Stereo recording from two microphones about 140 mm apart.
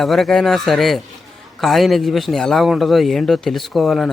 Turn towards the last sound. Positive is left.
turn(degrees=0)  # may be behind; listen again after turning